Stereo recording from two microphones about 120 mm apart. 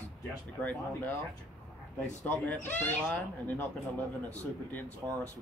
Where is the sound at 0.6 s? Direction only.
15° left (ahead or behind).